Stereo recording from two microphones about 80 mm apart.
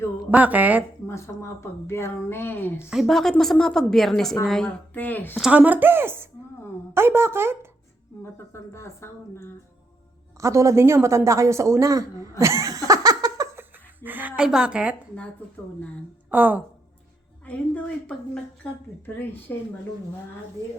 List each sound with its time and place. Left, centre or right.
0.3 s speech: centre
1.0 s speech: left
2.9 s a woman's voice: centre
4.9 s speech: left
5.5 s speech: centre
8.2 s speech: left
10.3 s speech: right
12.4 s laughter: right
13.6 s a sound: right
14.4 s speech: centre
16.3 s speech: right
17.4 s a woman's voice: centre
19.0 s speech: left